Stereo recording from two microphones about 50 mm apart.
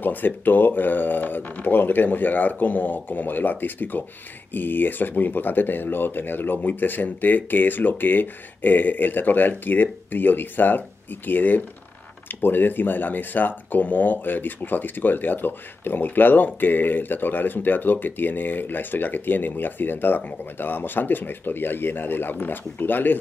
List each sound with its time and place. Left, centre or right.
0.0 s speech: left